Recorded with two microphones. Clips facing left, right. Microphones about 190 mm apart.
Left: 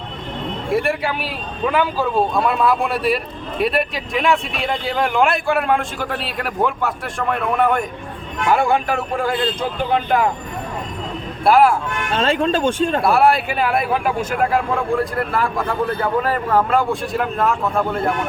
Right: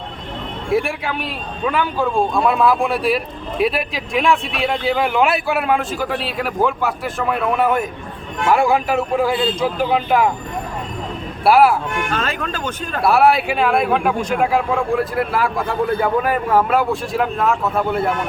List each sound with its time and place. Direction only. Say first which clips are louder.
0.7 s a man's voice: even; centre (ahead or behind)
11.4 s speech: right 1 dB; 5° right (ahead or behind)
12.1 s speech: left 6 dB; 30° left (ahead or behind)
13.1 s a man's voice: right 4 dB; centre (ahead or behind)